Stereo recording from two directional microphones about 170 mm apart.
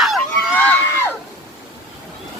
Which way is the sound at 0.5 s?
10° left (ahead or behind).